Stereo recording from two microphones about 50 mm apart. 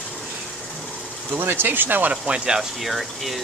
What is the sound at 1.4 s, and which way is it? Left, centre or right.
Speech, right.